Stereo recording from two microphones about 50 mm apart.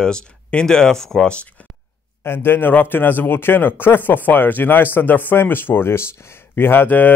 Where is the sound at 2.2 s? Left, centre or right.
Left.